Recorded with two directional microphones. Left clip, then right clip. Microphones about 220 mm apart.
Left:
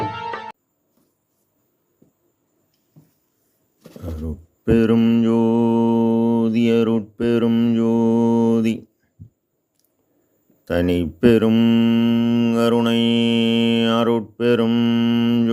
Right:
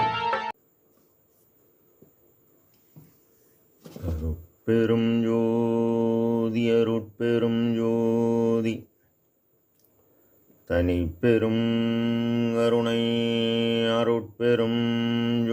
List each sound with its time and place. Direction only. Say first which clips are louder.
0.0 s music: right 2 dB; 25° right (ahead or behind)
4.0 s mantra: left 4 dB; 35° left (ahead or behind)
10.7 s mantra: left 5 dB; 40° left (ahead or behind)